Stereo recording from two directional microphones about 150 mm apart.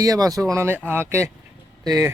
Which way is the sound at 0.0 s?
25° right (ahead or behind).